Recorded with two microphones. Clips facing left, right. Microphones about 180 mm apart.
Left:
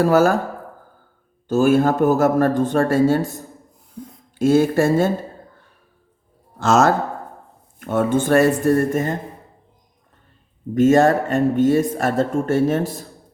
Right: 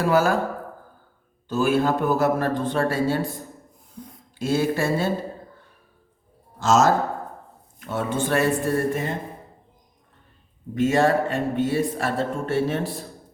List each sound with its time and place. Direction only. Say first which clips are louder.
0.0 s speech: left 5 dB; 45° left (ahead or behind)
1.5 s speech: left 5 dB; 45° left (ahead or behind)
4.4 s speech: left 7 dB; 50° left (ahead or behind)
6.6 s speech: left 2 dB; 60° left (ahead or behind); by 9.1 s 45° left (ahead or behind)
10.8 s speech: left 5 dB; 45° left (ahead or behind)